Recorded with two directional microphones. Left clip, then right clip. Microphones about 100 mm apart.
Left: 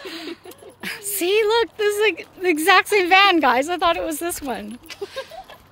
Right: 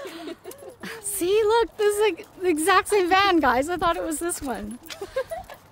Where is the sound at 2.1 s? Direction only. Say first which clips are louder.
Left 3 dB; 5° right (ahead or behind).